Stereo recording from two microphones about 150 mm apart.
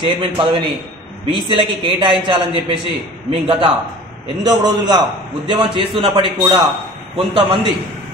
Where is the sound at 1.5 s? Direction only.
30° right (ahead or behind).